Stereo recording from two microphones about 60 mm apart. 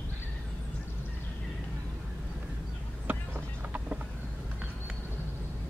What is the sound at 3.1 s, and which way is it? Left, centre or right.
Vehicle, right.